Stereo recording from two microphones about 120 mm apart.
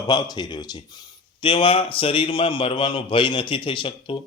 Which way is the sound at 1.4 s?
45° left (ahead or behind).